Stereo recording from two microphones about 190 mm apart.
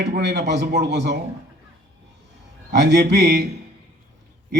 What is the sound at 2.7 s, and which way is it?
Speech, 65° right (ahead or behind).